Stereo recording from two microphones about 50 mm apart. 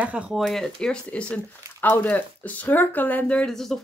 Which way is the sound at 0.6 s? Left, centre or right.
Centre.